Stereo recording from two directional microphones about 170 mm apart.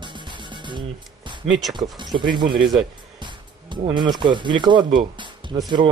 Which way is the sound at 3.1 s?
25° right (ahead or behind).